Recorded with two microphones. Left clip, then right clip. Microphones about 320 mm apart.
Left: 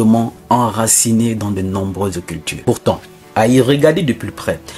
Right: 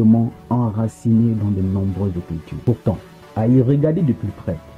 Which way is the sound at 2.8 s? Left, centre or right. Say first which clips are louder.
Left 8 dB; centre.